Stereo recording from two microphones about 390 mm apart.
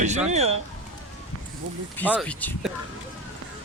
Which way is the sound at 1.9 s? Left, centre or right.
Centre.